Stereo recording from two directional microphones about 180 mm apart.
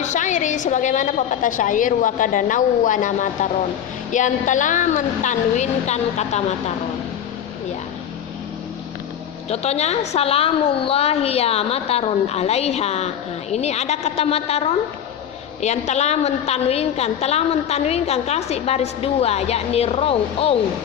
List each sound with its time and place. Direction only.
0.0 s a woman's voice: 45° left (ahead or behind)
9.5 s a woman's voice: 35° left (ahead or behind)
15.6 s a woman's voice: 40° left (ahead or behind)